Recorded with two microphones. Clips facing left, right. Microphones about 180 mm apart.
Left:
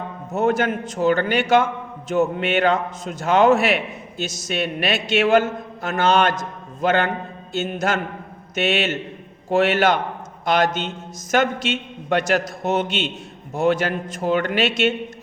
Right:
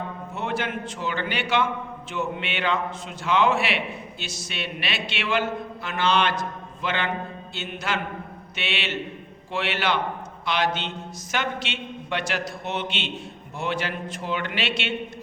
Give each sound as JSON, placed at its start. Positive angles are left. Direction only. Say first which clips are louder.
{"t": 0.3, "sound": "a man's voice", "louder": "left 10 dB", "side_deg": 45}